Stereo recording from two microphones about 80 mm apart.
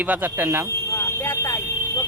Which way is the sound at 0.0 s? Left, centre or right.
Centre.